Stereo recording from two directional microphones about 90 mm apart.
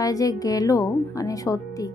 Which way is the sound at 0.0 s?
40° left (ahead or behind).